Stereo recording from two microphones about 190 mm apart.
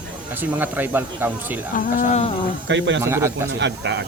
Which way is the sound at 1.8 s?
40° left (ahead or behind).